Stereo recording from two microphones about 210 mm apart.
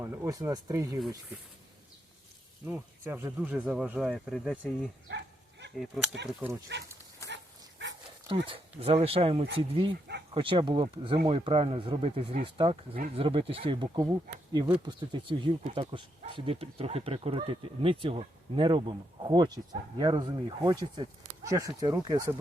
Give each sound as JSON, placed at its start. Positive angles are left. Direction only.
{"t": 0.0, "sound": "speech", "side_deg": -15}
{"t": 2.6, "sound": "speech", "side_deg": -10}
{"t": 5.0, "sound": "dog", "side_deg": -55}
{"t": 5.8, "sound": "speech", "side_deg": 0}
{"t": 7.2, "sound": "dog", "side_deg": 15}
{"t": 8.8, "sound": "speech", "side_deg": -25}